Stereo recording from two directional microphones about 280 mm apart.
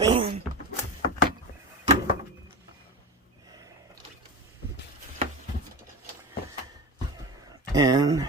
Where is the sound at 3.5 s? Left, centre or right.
Centre.